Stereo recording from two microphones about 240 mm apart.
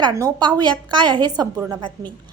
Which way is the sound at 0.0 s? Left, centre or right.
Centre.